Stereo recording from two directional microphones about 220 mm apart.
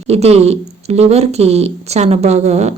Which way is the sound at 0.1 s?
30° right (ahead or behind).